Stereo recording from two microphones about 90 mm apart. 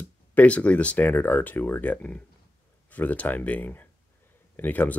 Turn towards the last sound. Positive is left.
turn(degrees=20)  # may be behind; listen again after turning